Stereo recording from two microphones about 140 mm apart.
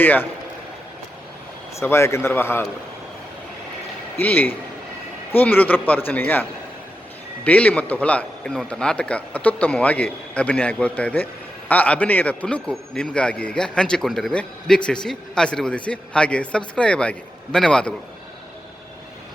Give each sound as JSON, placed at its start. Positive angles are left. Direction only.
{"t": 0.0, "sound": "a man's voice", "side_deg": 15}
{"t": 1.8, "sound": "a man's voice", "side_deg": 20}
{"t": 4.2, "sound": "a man's voice", "side_deg": 10}
{"t": 7.4, "sound": "a man's voice", "side_deg": 10}